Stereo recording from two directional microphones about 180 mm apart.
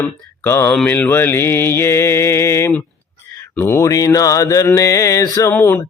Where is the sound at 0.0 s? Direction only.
15° left (ahead or behind).